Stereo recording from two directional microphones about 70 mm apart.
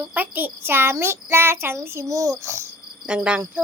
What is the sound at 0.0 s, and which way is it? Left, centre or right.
Child singing, right.